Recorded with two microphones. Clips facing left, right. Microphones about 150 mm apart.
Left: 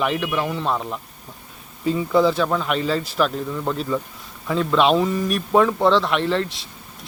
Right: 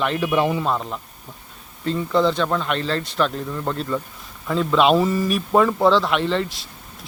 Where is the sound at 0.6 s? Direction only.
Centre (ahead or behind).